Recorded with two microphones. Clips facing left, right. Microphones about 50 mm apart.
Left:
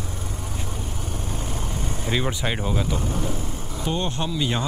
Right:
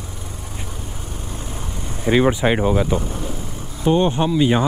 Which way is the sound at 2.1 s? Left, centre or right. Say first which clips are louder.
Right 10 dB; right.